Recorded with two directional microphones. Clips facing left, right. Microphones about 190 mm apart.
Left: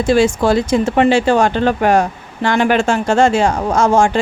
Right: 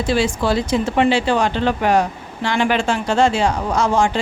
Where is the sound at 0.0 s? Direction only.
50° left (ahead or behind).